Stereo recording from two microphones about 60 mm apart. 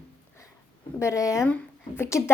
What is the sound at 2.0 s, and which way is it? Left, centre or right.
Speech, left.